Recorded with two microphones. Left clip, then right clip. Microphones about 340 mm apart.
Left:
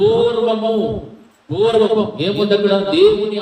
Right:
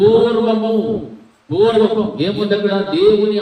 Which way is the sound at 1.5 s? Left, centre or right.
Left.